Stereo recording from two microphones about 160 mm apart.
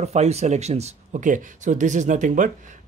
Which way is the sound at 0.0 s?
45° right (ahead or behind).